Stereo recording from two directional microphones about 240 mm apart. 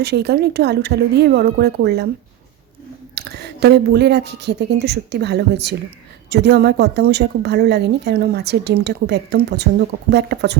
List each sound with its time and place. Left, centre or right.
0.0 s a woman's voice: right
3.2 s a woman's voice: right